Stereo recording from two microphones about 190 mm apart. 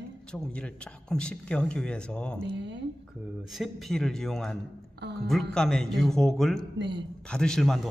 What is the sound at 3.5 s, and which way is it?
Speech, centre (ahead or behind).